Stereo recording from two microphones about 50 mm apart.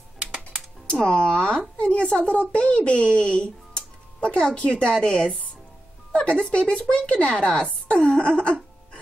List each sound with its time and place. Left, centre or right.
1.0 s a woman's voice: centre